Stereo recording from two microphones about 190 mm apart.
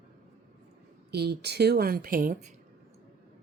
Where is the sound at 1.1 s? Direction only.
60° right (ahead or behind).